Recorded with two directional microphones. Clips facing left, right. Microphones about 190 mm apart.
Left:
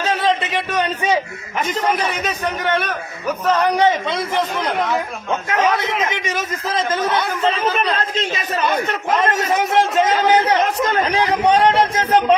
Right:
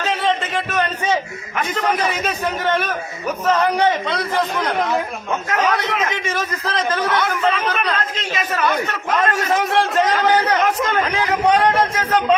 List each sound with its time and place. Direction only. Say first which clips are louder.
1.8 s a man's voice: right 1 dB; 10° left (ahead or behind)
2.2 s a man's voice: right 1 dB; centre (ahead or behind)
3.6 s a man's voice: left 1 dB; 20° left (ahead or behind)
5.5 s a man's voice: left 1 dB; 20° left (ahead or behind)